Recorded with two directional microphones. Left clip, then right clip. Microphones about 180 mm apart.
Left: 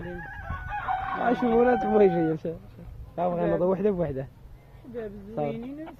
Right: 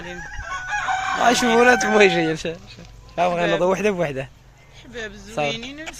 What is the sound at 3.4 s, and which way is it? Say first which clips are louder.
Speech: right 3 dB; 60° right (ahead or behind).